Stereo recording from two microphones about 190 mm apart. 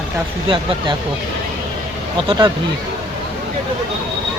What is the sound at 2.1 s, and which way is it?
Speech, 25° right (ahead or behind).